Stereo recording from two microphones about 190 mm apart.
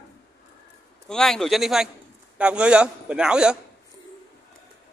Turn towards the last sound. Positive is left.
turn(degrees=-5)  # may be behind; listen again after turning